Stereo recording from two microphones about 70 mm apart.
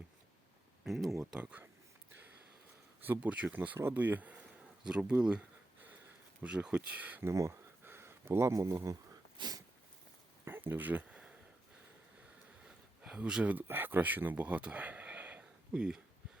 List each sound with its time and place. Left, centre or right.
0.9 s speech: centre
1.4 s speech: centre
3.0 s speech: right
4.8 s speech: centre
6.4 s speech: centre
7.3 s a sound: right
8.5 s speech: right
10.4 s speech: right
11.1 s a sound: centre
12.6 s a sound: centre
13.5 s speech: right